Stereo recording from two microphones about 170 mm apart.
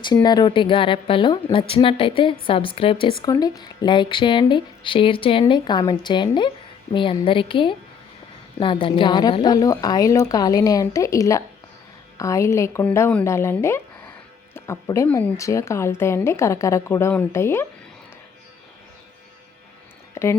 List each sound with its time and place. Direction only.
0.0 s a woman's voice: 25° left (ahead or behind)
20.2 s speech: 15° left (ahead or behind)